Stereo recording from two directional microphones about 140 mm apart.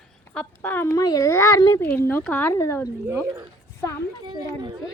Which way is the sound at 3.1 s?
20° right (ahead or behind).